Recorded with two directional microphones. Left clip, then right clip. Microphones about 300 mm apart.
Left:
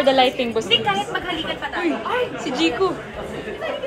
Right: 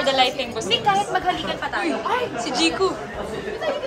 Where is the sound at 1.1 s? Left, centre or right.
Right.